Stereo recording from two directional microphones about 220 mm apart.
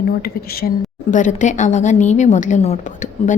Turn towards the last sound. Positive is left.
turn(degrees=35)  # may be behind; listen again after turning